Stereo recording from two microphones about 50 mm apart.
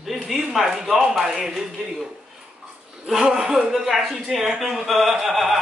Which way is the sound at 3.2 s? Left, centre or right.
Centre.